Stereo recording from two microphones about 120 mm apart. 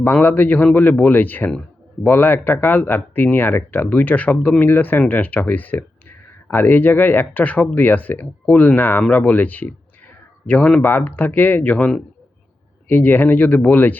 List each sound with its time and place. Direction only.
0.0 s speech: 15° left (ahead or behind)